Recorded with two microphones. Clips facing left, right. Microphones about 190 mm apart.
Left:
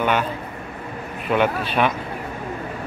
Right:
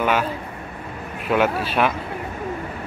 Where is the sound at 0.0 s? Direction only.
5° right (ahead or behind).